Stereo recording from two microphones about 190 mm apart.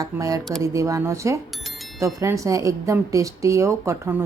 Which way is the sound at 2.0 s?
15° right (ahead or behind).